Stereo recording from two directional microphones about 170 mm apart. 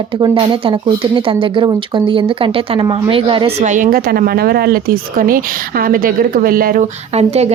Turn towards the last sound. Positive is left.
turn(degrees=-40)  # may be behind; listen again after turning